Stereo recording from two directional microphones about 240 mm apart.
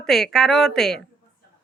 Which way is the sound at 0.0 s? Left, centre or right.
Centre.